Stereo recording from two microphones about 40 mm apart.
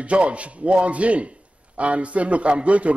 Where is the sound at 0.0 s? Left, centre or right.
Right.